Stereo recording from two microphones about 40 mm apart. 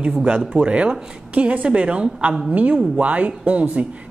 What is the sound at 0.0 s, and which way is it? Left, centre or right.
A woman's voice, right.